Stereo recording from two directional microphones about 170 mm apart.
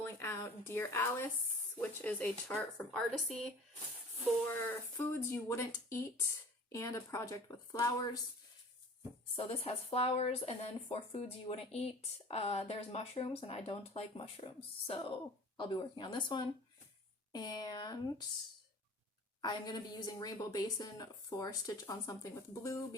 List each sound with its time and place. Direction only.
0.0 s a woman's voice: 15° left (ahead or behind)
5.3 s a woman's voice: 15° left (ahead or behind)
9.3 s a woman's voice: 35° left (ahead or behind)
19.4 s a woman's voice: 25° left (ahead or behind)